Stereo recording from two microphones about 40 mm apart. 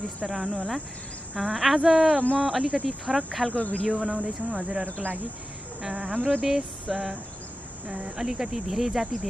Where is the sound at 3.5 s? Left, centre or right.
Left.